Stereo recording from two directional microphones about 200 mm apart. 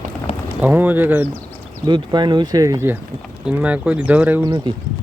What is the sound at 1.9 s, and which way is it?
Speech, 20° right (ahead or behind).